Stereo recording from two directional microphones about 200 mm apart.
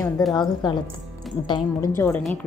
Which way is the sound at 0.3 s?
20° left (ahead or behind).